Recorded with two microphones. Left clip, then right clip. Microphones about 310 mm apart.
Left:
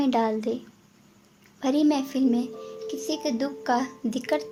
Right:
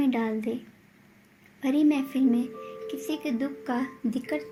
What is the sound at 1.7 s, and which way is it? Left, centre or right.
Speech, left.